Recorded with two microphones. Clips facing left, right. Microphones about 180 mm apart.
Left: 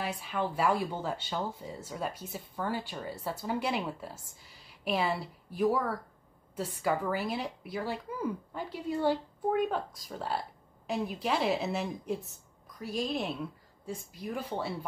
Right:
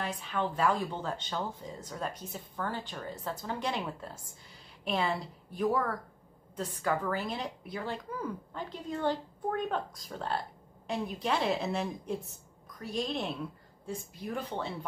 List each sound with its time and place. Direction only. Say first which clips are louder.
0.0 s a woman's voice: even; 5° left (ahead or behind)